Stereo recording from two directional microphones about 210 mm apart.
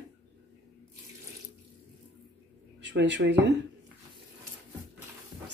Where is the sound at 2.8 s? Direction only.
55° right (ahead or behind).